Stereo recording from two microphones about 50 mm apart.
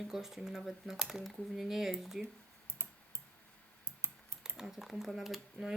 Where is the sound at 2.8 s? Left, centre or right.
Right.